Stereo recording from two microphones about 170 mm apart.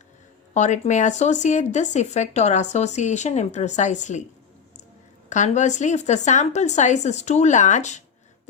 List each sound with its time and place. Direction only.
0.5 s speech: 45° left (ahead or behind)
5.3 s speech: 45° left (ahead or behind)